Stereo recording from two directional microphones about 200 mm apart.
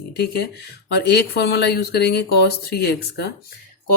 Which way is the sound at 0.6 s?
55° left (ahead or behind).